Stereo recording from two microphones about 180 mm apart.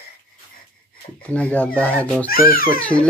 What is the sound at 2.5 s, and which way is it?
Speech, 55° left (ahead or behind).